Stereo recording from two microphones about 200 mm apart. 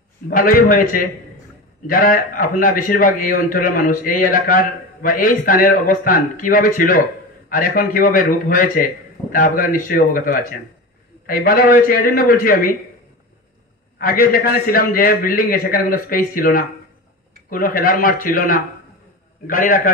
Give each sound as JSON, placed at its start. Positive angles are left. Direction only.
{"t": 0.3, "sound": "a man's voice", "side_deg": 45}
{"t": 13.9, "sound": "a man's voice", "side_deg": 45}